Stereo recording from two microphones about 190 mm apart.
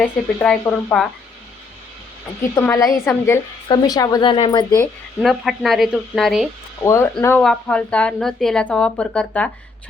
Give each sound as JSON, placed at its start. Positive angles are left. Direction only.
{"t": 0.0, "sound": "speech", "side_deg": 5}
{"t": 2.6, "sound": "a woman's voice", "side_deg": 15}
{"t": 5.2, "sound": "a woman's voice", "side_deg": 0}
{"t": 6.8, "sound": "a woman's voice", "side_deg": 15}